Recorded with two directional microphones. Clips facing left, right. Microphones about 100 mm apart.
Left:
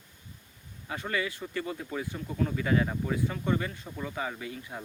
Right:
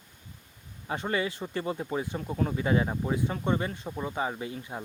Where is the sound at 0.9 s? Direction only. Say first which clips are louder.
Right 3 dB; 30° right (ahead or behind).